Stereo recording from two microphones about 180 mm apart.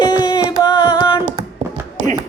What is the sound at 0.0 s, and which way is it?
Music, 25° left (ahead or behind).